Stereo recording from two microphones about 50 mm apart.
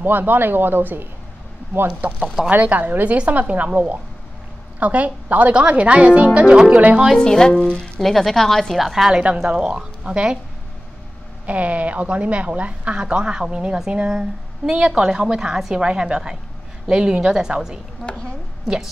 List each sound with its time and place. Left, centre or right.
0.0 s speech: right
1.9 s a woman's voice: right
5.5 s a woman's voice: right
7.2 s speech: centre
8.0 s speech: centre
8.7 s a woman's voice: centre
9.1 s a woman's voice: right
11.4 s a woman's voice: right; by 17.7 s centre
18.0 s a woman's voice: left